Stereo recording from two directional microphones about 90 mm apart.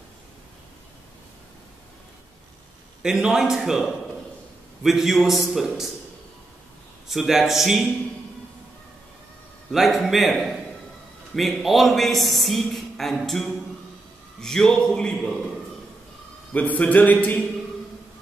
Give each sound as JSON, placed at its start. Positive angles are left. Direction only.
{"t": 3.0, "sound": "a man's voice", "side_deg": -5}
{"t": 7.1, "sound": "a man's voice", "side_deg": -5}
{"t": 9.7, "sound": "a man's voice", "side_deg": 0}
{"t": 16.5, "sound": "a sound", "side_deg": 15}